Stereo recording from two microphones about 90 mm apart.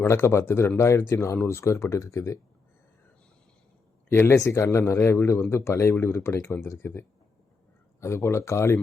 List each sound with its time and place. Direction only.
0.0 s speech: 30° left (ahead or behind)
4.1 s speech: 25° left (ahead or behind)
8.0 s speech: 30° left (ahead or behind)